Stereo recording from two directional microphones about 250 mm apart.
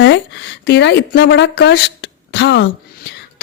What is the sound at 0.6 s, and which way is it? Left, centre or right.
A woman's voice, left.